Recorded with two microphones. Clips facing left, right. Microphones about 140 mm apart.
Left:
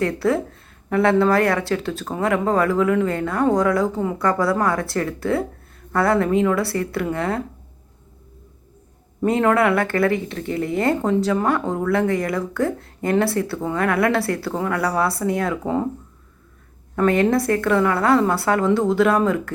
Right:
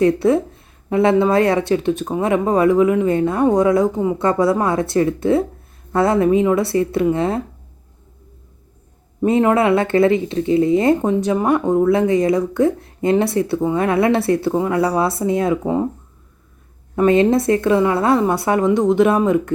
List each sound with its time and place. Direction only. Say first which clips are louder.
0.0 s speech: right 6 dB; 20° right (ahead or behind)
9.2 s speech: right 3 dB; 20° right (ahead or behind)
16.9 s speech: right 4 dB; 20° right (ahead or behind)